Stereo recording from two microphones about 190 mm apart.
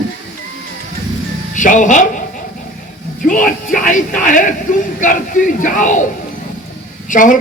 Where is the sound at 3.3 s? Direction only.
45° left (ahead or behind).